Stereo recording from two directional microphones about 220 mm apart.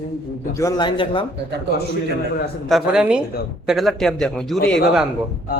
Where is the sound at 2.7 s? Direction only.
5° right (ahead or behind).